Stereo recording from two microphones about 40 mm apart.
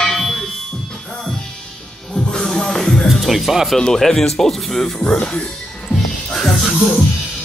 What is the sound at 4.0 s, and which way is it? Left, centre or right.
Speech, centre.